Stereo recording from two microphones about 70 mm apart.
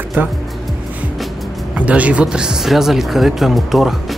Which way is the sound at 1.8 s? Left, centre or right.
Centre.